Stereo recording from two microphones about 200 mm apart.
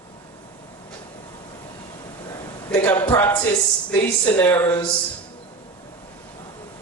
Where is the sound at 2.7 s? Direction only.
10° left (ahead or behind).